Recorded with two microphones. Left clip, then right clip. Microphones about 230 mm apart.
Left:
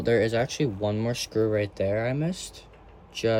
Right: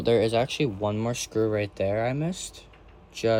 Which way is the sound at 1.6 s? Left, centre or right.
Centre.